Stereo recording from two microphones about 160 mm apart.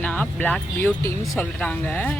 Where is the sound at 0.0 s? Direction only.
10° left (ahead or behind).